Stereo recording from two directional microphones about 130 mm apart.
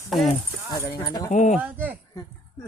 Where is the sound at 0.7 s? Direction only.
30° left (ahead or behind).